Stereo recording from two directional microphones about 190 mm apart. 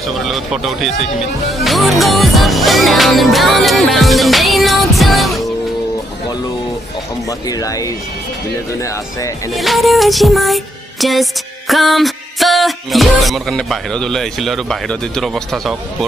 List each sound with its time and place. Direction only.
0.2 s music: centre (ahead or behind)
7.2 s speech: 20° left (ahead or behind)
9.5 s music: centre (ahead or behind)